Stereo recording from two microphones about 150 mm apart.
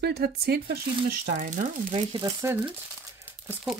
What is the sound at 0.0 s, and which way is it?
Speech, 90° right.